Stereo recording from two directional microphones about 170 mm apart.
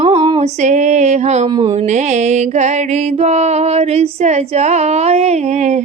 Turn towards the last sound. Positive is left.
turn(degrees=-45)  # may be behind; listen again after turning